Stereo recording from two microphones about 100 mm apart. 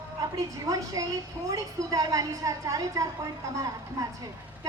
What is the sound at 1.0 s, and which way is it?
A woman's voice, 40° right (ahead or behind).